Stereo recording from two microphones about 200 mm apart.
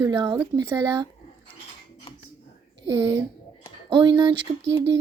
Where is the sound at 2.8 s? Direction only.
15° right (ahead or behind).